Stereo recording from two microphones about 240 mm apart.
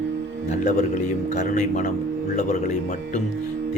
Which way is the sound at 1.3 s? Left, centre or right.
Left.